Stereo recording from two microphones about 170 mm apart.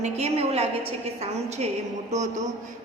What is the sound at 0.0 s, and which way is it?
A woman's voice, 35° right (ahead or behind).